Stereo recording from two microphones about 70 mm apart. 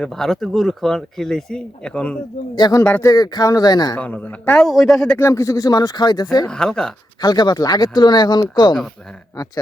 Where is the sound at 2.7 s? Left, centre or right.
Left.